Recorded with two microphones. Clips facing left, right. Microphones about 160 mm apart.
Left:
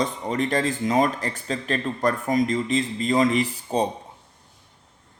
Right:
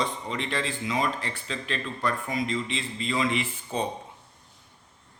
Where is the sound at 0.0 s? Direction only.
45° left (ahead or behind).